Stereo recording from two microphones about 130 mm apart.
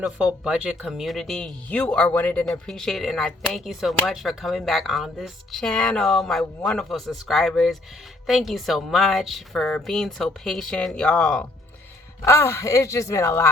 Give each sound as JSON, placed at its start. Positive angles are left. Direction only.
{"t": 0.4, "sound": "speech", "side_deg": -5}
{"t": 12.2, "sound": "speech", "side_deg": 20}